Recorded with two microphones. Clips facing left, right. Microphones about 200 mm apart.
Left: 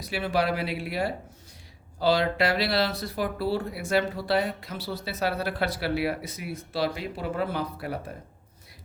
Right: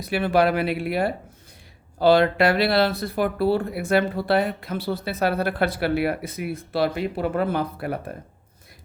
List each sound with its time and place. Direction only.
0.0 s speech: 55° right (ahead or behind)